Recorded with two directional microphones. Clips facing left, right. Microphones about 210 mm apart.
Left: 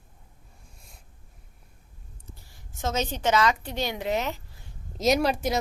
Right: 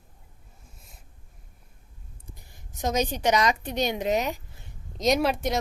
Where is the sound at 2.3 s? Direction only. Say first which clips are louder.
Even; 20° right (ahead or behind).